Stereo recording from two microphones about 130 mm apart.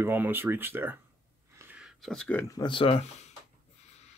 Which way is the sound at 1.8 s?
Centre (ahead or behind).